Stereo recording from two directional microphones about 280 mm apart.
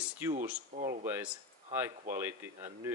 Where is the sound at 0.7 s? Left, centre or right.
Right.